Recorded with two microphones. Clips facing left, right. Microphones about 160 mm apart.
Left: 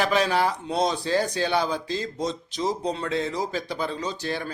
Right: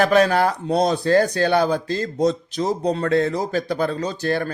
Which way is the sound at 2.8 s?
55° right (ahead or behind).